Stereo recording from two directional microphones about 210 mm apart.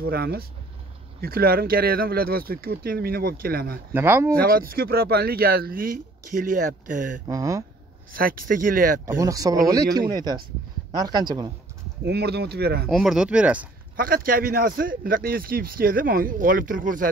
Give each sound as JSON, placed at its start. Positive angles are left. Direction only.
{"t": 0.0, "sound": "speech", "side_deg": -45}
{"t": 3.9, "sound": "speech", "side_deg": -10}
{"t": 4.3, "sound": "speech", "side_deg": -45}
{"t": 7.2, "sound": "speech", "side_deg": -15}
{"t": 8.1, "sound": "speech", "side_deg": -45}
{"t": 9.0, "sound": "speech", "side_deg": -15}
{"t": 12.0, "sound": "speech", "side_deg": -50}
{"t": 12.8, "sound": "speech", "side_deg": 0}
{"t": 13.9, "sound": "speech", "side_deg": -45}